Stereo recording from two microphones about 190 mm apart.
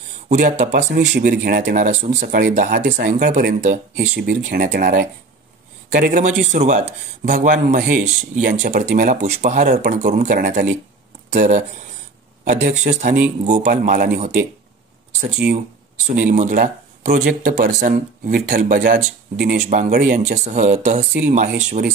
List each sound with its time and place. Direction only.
0.3 s speech: 50° right (ahead or behind)
16.1 s speech: 40° right (ahead or behind)
20.2 s speech: 40° right (ahead or behind)